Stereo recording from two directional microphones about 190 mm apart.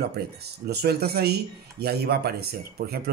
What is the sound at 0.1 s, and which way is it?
Speech, 55° right (ahead or behind).